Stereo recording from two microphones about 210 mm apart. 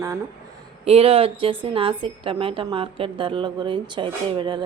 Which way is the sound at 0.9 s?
30° right (ahead or behind).